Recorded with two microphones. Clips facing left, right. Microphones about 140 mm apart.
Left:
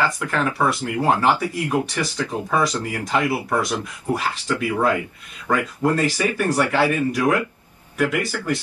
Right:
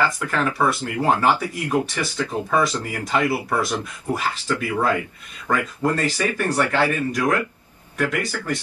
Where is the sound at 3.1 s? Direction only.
10° left (ahead or behind).